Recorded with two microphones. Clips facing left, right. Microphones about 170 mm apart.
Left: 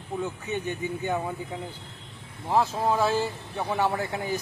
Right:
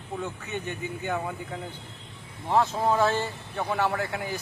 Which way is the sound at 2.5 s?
5° left (ahead or behind).